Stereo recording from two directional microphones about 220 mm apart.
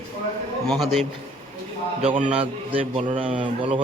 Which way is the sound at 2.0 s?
25° right (ahead or behind).